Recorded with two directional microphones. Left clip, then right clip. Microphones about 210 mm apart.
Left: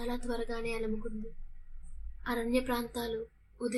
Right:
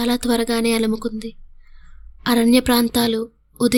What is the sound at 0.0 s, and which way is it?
A woman's voice, 50° right (ahead or behind).